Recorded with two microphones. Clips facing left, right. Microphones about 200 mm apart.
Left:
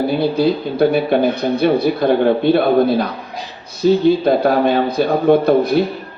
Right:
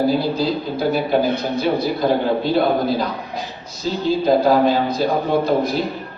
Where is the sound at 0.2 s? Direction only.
60° left (ahead or behind).